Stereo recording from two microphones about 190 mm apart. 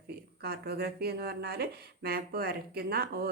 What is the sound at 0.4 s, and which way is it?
A woman's voice, 55° right (ahead or behind).